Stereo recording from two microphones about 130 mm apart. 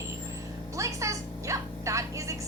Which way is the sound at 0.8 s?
25° right (ahead or behind).